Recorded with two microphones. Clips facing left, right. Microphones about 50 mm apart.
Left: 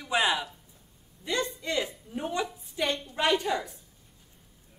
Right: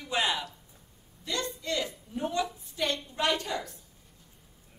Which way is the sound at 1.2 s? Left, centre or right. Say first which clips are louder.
Left 3 dB; left.